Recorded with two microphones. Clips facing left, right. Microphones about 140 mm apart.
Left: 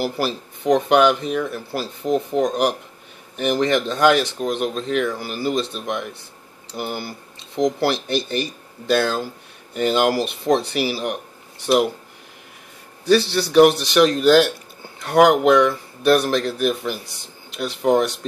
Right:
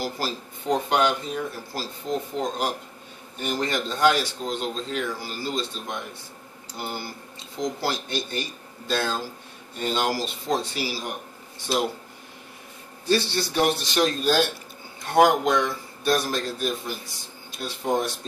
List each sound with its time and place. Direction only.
0.0 s speech: 70° left (ahead or behind)
7.3 s speech: 65° left (ahead or behind)
13.1 s speech: 70° left (ahead or behind)